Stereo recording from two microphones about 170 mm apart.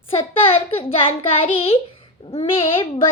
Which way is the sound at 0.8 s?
35° left (ahead or behind).